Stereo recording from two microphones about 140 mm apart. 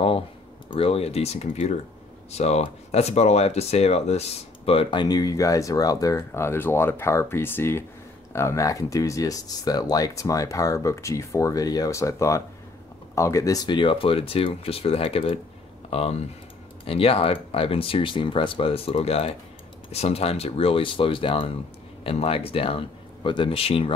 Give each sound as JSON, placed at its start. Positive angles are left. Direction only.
{"t": 0.7, "sound": "speech", "side_deg": 45}
{"t": 5.0, "sound": "speech", "side_deg": 25}
{"t": 13.7, "sound": "speech", "side_deg": 35}